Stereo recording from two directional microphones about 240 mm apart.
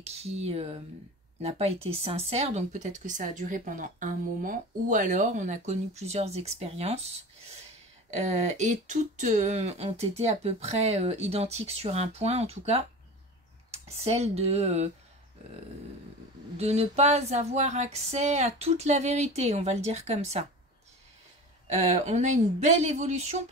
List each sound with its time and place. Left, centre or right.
0.0 s speech: right
8.1 s speech: right
16.5 s speech: right
21.6 s speech: right